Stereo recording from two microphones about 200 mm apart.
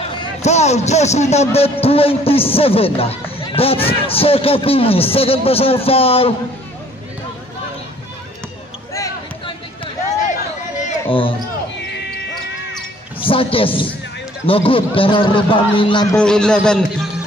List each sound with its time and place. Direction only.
0.4 s a man's voice: 35° left (ahead or behind)
11.1 s speech: 25° left (ahead or behind)
13.2 s a man's voice: 25° left (ahead or behind)
16.1 s a man's voice: 5° left (ahead or behind)